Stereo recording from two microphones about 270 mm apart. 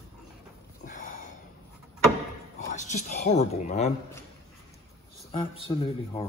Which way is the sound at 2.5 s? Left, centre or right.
Left.